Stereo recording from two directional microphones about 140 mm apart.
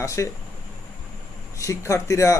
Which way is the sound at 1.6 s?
20° left (ahead or behind).